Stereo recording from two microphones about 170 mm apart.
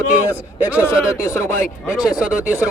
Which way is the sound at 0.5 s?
10° right (ahead or behind).